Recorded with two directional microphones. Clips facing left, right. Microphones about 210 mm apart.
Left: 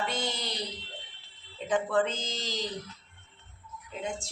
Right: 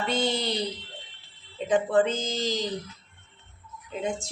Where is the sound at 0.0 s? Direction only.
30° right (ahead or behind).